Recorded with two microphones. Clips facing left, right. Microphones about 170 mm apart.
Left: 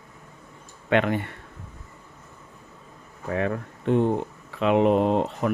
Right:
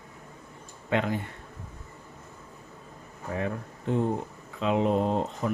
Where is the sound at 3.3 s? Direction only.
70° left (ahead or behind).